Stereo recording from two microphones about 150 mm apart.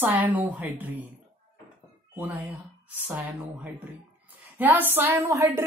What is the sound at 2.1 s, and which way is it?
A woman's voice, 10° right (ahead or behind).